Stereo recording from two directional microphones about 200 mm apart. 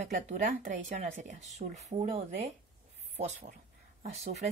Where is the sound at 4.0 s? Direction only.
35° right (ahead or behind).